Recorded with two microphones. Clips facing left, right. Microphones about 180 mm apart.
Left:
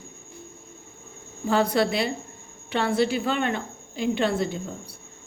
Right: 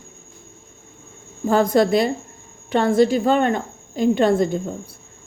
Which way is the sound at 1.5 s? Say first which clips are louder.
Right 6 dB; 45° right (ahead or behind).